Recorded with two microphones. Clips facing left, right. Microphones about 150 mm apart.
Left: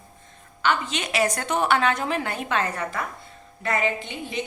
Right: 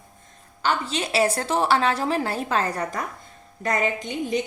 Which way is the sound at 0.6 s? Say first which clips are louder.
Even; 35° right (ahead or behind).